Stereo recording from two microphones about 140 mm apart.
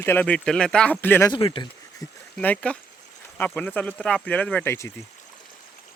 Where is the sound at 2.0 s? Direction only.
25° left (ahead or behind).